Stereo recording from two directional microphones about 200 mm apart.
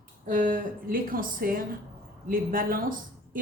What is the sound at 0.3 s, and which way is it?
Speech, 40° right (ahead or behind).